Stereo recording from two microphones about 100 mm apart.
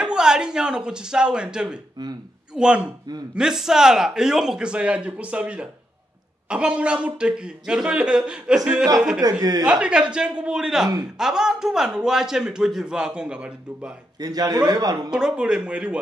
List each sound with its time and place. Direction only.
0.0 s a man's voice: 5° right (ahead or behind)
2.0 s speech: 45° right (ahead or behind)
2.5 s a man's voice: 10° right (ahead or behind)
9.4 s a man's voice: 40° right (ahead or behind)
9.7 s a man's voice: 10° right (ahead or behind)
14.1 s a man's voice: 40° right (ahead or behind)
15.0 s a man's voice: 10° right (ahead or behind)